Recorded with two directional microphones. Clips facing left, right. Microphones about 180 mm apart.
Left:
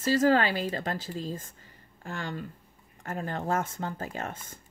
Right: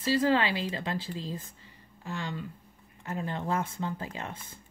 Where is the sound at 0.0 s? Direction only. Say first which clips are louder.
Left 2 dB; 45° left (ahead or behind).